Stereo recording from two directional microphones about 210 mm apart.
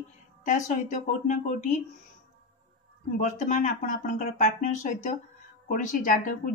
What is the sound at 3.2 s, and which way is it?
Speech, 40° left (ahead or behind).